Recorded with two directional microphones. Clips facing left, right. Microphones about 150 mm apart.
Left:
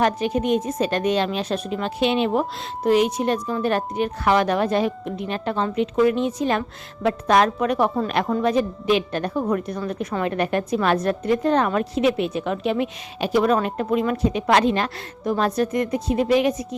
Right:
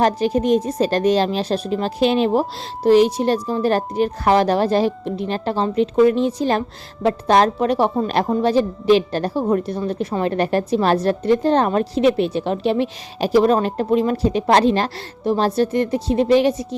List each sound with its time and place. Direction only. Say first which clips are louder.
0.0 s a woman's voice: right 3 dB; 35° right (ahead or behind)